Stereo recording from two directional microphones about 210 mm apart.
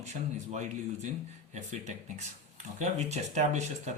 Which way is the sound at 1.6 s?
35° right (ahead or behind).